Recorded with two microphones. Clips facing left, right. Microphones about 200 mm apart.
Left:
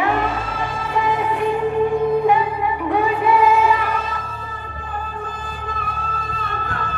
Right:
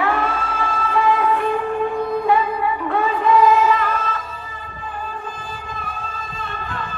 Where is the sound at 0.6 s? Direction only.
15° left (ahead or behind).